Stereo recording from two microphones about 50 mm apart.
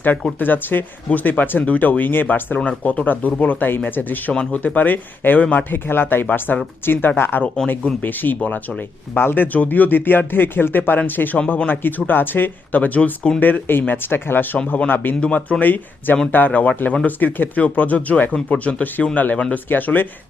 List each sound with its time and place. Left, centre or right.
0.3 s speech: left
4.3 s speech: left
7.4 s speech: centre
8.0 s speech: left
13.4 s speech: left
15.2 s speech: left
17.1 s speech: left